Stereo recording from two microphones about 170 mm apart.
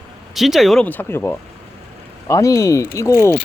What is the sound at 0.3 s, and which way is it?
Speech, centre (ahead or behind).